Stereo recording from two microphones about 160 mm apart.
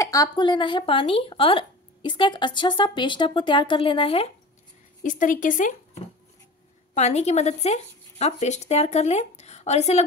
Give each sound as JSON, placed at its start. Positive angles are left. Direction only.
{"t": 0.0, "sound": "speech", "side_deg": 20}
{"t": 5.0, "sound": "a woman's voice", "side_deg": 55}
{"t": 6.9, "sound": "speech", "side_deg": 45}